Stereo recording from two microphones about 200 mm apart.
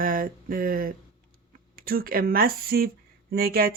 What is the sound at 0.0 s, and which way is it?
Speech, 45° right (ahead or behind).